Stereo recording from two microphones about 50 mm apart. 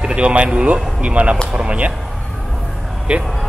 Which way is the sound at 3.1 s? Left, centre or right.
Right.